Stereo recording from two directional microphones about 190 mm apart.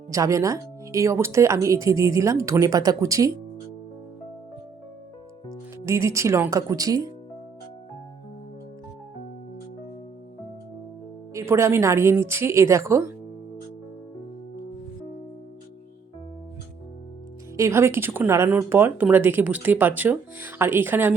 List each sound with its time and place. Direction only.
0.1 s speech: 15° right (ahead or behind)
5.8 s speech: 15° right (ahead or behind)
11.3 s speech: 15° right (ahead or behind)
17.6 s speech: 15° right (ahead or behind)